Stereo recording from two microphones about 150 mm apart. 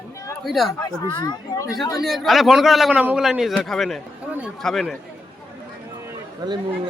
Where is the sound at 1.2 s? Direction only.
25° left (ahead or behind).